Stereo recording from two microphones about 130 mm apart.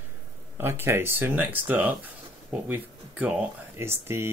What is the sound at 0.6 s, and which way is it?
Speech, 20° right (ahead or behind).